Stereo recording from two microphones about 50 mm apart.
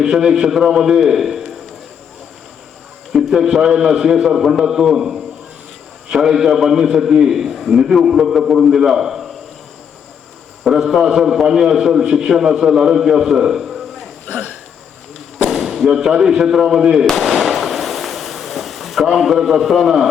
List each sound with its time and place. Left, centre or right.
0.0 s a man's voice: centre
3.1 s a man's voice: centre
10.6 s a man's voice: centre
14.3 s hiccup: right
15.4 s a man's voice: centre
17.2 s firecracker: centre
19.0 s a man's voice: centre